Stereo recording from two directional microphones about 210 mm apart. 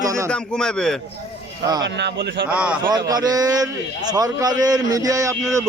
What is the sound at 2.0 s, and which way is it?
Speech, 55° right (ahead or behind).